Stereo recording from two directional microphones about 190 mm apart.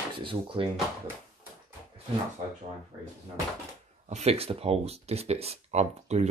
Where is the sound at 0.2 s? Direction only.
25° right (ahead or behind).